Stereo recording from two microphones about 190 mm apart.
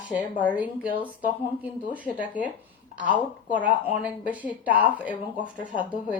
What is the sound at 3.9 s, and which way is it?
Speech, 10° right (ahead or behind).